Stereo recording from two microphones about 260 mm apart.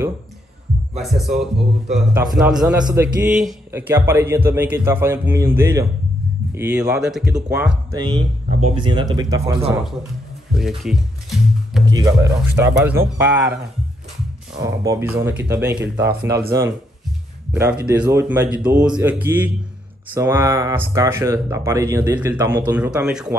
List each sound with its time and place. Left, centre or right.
0.9 s a man's voice: centre
7.9 s a man's voice: centre
10.5 s music: centre
11.8 s a man's voice: centre
14.6 s a man's voice: centre
15.8 s speech: right
16.2 s a man's voice: centre
17.9 s a man's voice: centre